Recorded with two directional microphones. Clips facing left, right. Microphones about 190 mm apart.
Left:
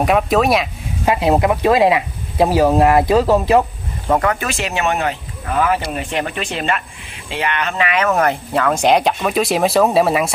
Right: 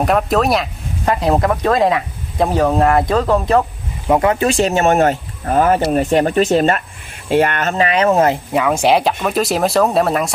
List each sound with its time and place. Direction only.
0.0 s speech: centre (ahead or behind)
4.1 s speech: 20° right (ahead or behind)
8.5 s speech: 10° right (ahead or behind)